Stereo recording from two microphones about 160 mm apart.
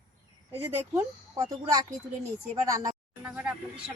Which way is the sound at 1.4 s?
20° right (ahead or behind).